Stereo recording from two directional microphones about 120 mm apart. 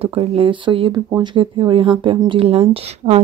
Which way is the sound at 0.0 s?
55° right (ahead or behind).